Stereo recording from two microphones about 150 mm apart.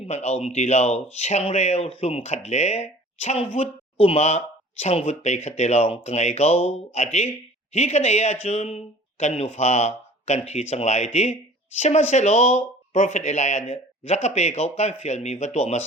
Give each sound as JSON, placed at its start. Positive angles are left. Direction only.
{"t": 0.0, "sound": "speech", "side_deg": 45}